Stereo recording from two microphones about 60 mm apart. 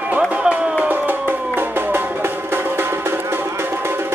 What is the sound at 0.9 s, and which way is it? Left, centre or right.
Music, right.